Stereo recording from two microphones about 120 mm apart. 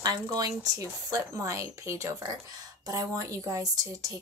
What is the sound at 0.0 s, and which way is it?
Speech, 30° right (ahead or behind).